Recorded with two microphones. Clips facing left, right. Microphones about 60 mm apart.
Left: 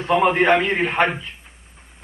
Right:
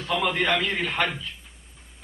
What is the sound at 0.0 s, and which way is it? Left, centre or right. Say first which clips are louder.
Speech: left 8 dB; left.